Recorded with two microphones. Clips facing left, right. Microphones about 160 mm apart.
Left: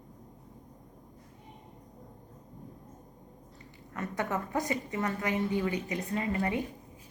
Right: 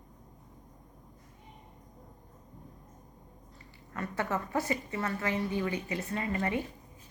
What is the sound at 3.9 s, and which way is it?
A woman's voice, 20° left (ahead or behind).